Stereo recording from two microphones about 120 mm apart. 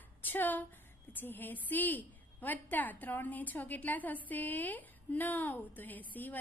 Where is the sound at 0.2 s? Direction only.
15° left (ahead or behind).